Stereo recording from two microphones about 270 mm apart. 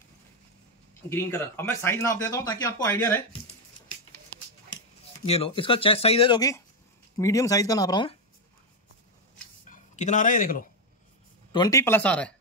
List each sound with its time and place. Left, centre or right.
1.0 s speech: centre
5.2 s speech: left
9.7 s speech: left
11.5 s speech: centre